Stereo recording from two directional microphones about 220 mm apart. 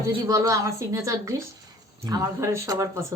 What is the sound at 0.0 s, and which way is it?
Speech, 15° right (ahead or behind).